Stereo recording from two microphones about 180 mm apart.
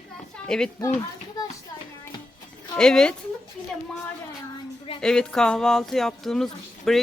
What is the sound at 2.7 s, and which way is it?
Speech, 5° left (ahead or behind).